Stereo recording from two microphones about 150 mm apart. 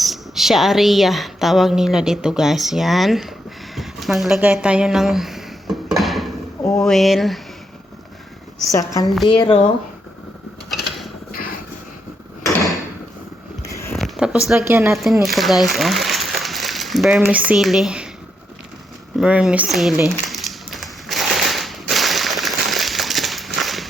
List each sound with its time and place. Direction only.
0.0 s a woman's voice: centre (ahead or behind)
3.8 s a sound: centre (ahead or behind)
6.6 s speech: 20° left (ahead or behind)
6.8 s a woman's voice: centre (ahead or behind)
8.7 s a woman's voice: 20° left (ahead or behind)
9.2 s speech: 30° left (ahead or behind)
11.3 s vehicle: 75° left (ahead or behind)
13.9 s a sound: centre (ahead or behind)
15.0 s speech: centre (ahead or behind)
19.2 s a woman's voice: 5° right (ahead or behind)
20.1 s crumpling: centre (ahead or behind)